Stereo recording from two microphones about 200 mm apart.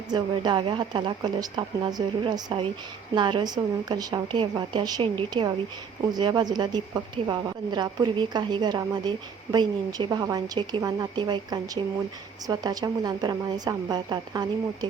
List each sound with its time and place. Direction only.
0.1 s a woman's voice: 20° right (ahead or behind)